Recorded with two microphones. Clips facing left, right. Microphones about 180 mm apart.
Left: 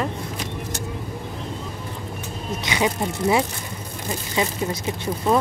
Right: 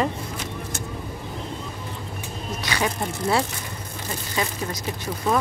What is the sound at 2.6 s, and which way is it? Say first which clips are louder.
Speech: left 3 dB; 20° left (ahead or behind).